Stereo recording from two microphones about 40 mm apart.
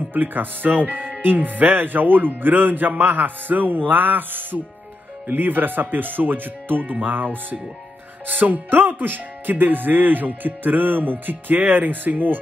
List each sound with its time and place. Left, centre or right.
0.1 s speech: right